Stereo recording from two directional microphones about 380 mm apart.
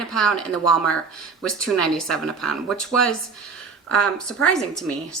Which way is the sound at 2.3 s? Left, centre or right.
Left.